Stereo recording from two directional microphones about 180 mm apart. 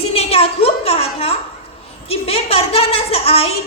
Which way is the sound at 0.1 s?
35° left (ahead or behind).